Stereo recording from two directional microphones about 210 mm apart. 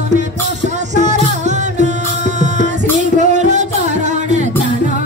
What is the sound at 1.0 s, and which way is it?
Music, 35° right (ahead or behind).